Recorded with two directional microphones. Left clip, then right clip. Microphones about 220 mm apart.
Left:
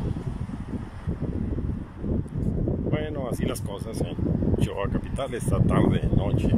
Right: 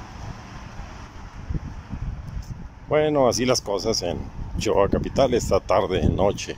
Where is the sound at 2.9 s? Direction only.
25° right (ahead or behind).